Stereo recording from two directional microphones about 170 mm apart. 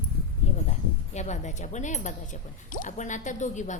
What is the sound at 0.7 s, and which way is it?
Speech, 40° left (ahead or behind).